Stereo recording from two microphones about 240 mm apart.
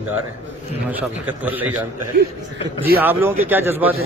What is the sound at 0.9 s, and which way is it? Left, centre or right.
Speech, centre.